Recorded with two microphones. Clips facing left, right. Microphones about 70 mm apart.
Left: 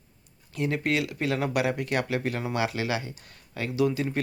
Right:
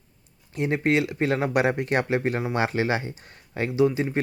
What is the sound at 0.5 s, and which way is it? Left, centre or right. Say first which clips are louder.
Speech: right 4 dB; right.